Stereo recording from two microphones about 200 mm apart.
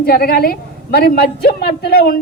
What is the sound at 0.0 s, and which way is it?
A woman's voice, 50° left (ahead or behind).